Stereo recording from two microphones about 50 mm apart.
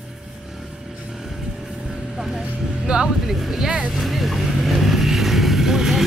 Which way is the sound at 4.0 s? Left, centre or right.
Centre.